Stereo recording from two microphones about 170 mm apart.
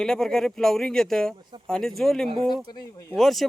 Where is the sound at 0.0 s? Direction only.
5° left (ahead or behind).